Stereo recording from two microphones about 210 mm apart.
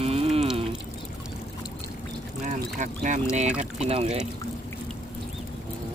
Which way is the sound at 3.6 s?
30° right (ahead or behind).